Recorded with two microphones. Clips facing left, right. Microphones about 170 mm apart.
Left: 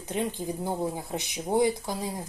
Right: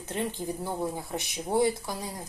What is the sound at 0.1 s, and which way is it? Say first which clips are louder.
Speech: left 2 dB; 15° left (ahead or behind).